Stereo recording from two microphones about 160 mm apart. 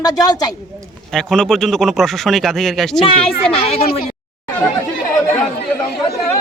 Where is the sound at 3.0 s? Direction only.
35° left (ahead or behind).